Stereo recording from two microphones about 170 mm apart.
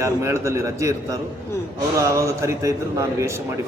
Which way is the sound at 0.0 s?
15° right (ahead or behind).